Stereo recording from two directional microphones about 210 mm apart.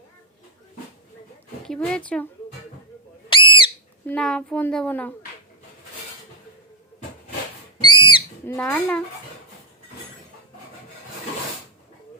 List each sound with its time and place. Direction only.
1.6 s speech: 5° left (ahead or behind)
3.2 s whistle: 25° left (ahead or behind)
4.0 s a woman's voice: 5° left (ahead or behind)
7.8 s whistle: 25° left (ahead or behind)
8.4 s a woman's voice: 10° left (ahead or behind)